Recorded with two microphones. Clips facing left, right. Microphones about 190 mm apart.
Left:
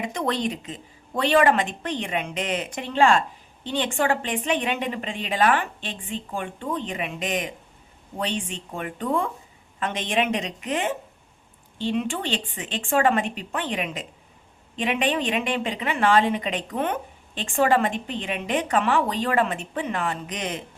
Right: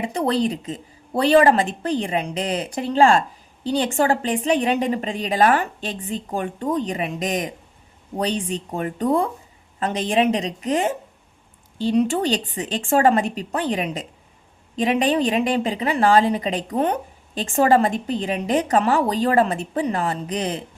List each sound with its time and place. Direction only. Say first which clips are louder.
0.0 s a woman's voice: right 5 dB; 35° right (ahead or behind)